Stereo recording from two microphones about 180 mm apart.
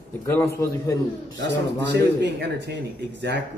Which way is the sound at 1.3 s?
80° right.